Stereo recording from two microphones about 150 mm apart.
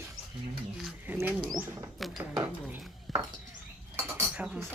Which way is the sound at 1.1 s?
15° right (ahead or behind).